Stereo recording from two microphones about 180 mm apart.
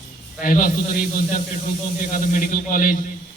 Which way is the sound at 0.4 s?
50° left (ahead or behind).